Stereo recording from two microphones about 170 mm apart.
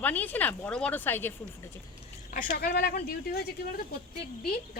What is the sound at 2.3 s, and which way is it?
Speech, 60° left (ahead or behind).